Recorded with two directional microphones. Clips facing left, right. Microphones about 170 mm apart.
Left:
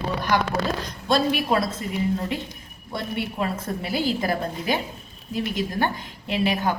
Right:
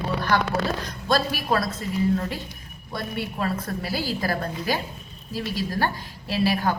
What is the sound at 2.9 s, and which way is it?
A woman's voice, 25° left (ahead or behind).